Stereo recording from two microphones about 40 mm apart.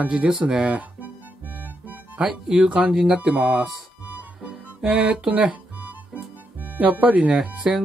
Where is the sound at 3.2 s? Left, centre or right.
Right.